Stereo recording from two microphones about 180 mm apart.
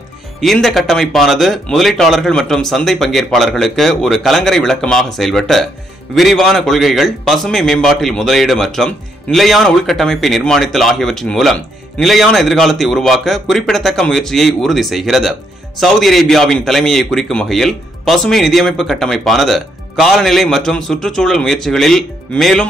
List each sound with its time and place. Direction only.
0.4 s a man's voice: centre (ahead or behind)